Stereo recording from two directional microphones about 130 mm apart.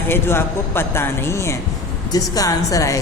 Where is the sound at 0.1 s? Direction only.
15° left (ahead or behind).